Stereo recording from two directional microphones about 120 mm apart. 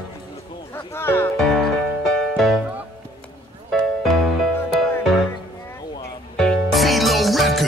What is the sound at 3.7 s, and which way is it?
Music, centre (ahead or behind).